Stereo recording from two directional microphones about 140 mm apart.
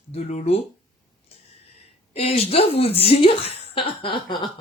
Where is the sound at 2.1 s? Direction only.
45° left (ahead or behind).